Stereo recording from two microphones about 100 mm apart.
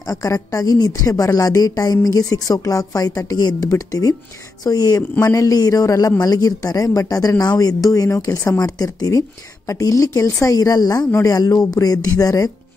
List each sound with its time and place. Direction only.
0.0 s a woman's voice: 35° left (ahead or behind)